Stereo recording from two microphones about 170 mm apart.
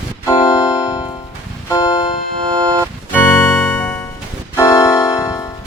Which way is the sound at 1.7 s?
30° left (ahead or behind).